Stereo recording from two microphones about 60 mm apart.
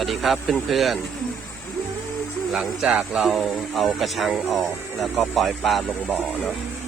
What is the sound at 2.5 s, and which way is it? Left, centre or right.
Speech, centre.